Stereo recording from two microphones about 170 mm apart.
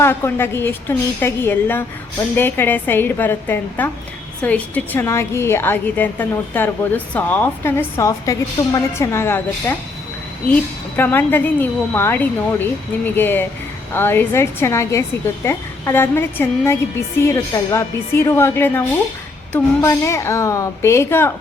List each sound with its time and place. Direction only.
0.0 s a woman's voice: 15° left (ahead or behind)